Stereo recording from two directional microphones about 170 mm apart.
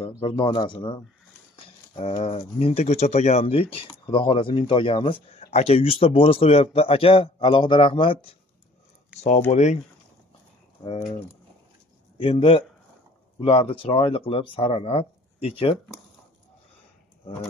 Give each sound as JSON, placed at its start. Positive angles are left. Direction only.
{"t": 0.0, "sound": "a man's voice", "side_deg": 30}
{"t": 2.0, "sound": "speech", "side_deg": 35}
{"t": 9.1, "sound": "a sound", "side_deg": -5}
{"t": 9.5, "sound": "speech", "side_deg": 40}
{"t": 12.2, "sound": "speech", "side_deg": 30}